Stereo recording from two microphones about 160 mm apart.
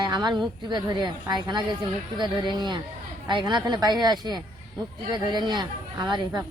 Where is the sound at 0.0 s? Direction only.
25° right (ahead or behind).